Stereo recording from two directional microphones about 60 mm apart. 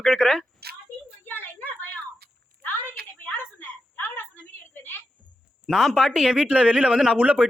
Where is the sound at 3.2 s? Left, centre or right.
Left.